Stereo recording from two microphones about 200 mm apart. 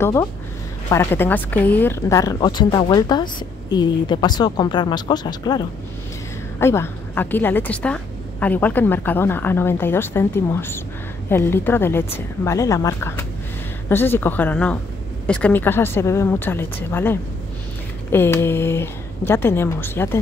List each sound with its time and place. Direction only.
0.0 s a woman's voice: 15° left (ahead or behind)
6.6 s a woman's voice: 10° left (ahead or behind)